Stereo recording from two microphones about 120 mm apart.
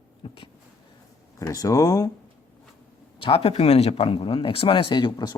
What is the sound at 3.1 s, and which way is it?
Speech, 50° left (ahead or behind).